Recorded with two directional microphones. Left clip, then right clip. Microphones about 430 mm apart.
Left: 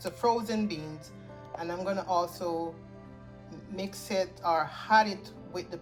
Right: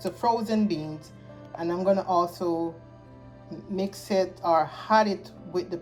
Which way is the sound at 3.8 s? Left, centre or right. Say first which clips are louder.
Right 5 dB; centre.